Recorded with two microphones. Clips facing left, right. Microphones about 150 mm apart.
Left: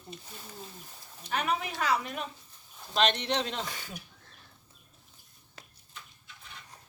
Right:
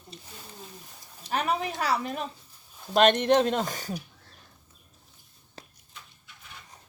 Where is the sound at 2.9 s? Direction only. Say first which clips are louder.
Right 8 dB; 50° right (ahead or behind).